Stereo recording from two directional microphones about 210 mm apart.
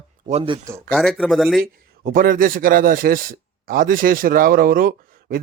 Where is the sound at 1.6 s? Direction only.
45° right (ahead or behind).